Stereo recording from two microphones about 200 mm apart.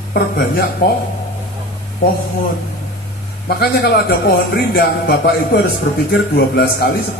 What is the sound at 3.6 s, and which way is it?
A man's voice, 55° left (ahead or behind).